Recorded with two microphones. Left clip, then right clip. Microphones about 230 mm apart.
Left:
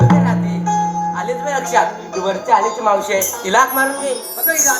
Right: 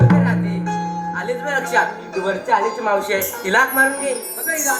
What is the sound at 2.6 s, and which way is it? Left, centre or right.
Speech, left.